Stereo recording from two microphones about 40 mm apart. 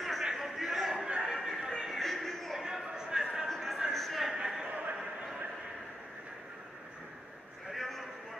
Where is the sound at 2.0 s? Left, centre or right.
Centre.